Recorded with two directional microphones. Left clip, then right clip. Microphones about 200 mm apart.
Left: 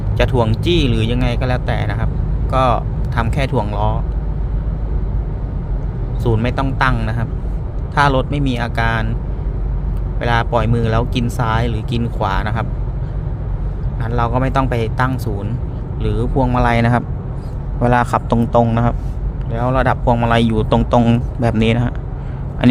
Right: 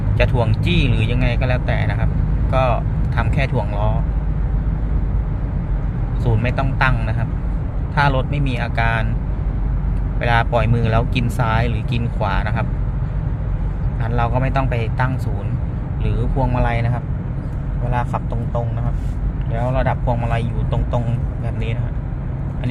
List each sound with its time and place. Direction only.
0.2 s speech: 25° left (ahead or behind)
6.2 s speech: 20° left (ahead or behind)
10.2 s speech: 15° left (ahead or behind)
14.1 s speech: 20° left (ahead or behind); by 17.0 s 40° left (ahead or behind)
17.8 s speech: 55° left (ahead or behind)
19.5 s speech: 35° left (ahead or behind)
20.6 s speech: 55° left (ahead or behind)